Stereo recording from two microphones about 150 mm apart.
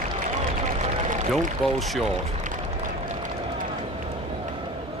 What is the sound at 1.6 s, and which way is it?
Speech, centre (ahead or behind).